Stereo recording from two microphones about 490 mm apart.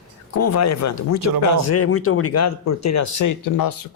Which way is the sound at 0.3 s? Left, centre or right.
Left.